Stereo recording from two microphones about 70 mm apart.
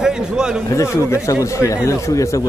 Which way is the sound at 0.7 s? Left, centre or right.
Left.